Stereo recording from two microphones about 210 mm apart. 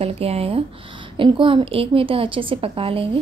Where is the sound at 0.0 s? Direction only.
30° right (ahead or behind).